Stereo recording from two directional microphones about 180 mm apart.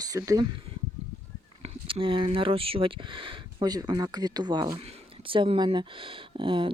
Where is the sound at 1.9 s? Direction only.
30° right (ahead or behind).